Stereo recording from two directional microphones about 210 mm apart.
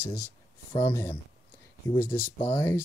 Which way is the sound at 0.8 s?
10° left (ahead or behind).